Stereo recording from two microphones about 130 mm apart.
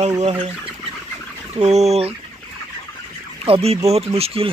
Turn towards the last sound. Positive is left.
turn(degrees=-50)  # may be behind; listen again after turning